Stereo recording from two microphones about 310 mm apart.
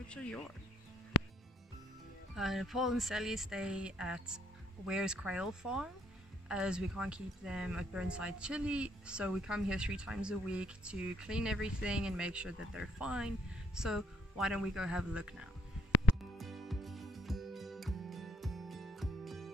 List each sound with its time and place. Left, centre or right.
1.1 s music: left
2.3 s speech: centre
16.3 s music: centre